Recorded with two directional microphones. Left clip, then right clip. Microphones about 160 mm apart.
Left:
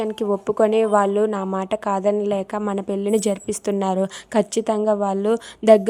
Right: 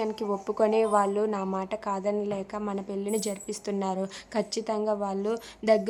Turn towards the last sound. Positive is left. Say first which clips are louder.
# left 10 dB
turn(degrees=40)  # may be behind; listen again after turning